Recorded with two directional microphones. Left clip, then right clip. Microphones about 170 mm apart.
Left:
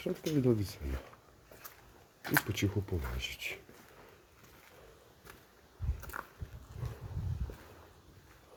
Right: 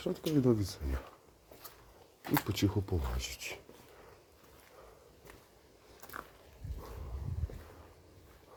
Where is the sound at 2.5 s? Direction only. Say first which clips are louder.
Right 2 dB; 15° right (ahead or behind).